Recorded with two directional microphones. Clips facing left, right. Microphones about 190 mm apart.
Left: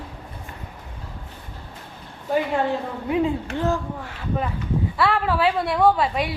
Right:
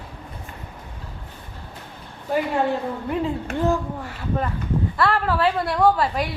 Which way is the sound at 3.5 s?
10° right (ahead or behind).